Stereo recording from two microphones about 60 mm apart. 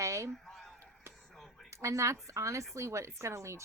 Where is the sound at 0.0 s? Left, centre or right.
Right.